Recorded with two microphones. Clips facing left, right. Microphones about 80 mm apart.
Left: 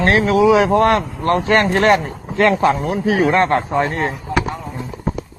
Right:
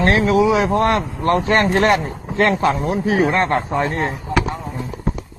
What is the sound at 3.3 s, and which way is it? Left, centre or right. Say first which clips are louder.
Speech: left 3 dB; left.